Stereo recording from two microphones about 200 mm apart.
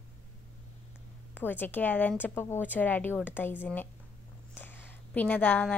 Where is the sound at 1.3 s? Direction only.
10° left (ahead or behind).